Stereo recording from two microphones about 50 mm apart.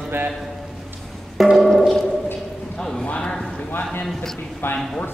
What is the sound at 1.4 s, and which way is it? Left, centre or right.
Music, centre.